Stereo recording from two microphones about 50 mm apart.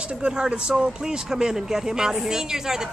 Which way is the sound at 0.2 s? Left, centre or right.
Centre.